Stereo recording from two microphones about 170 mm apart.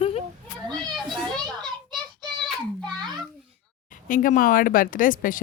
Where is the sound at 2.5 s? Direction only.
5° left (ahead or behind).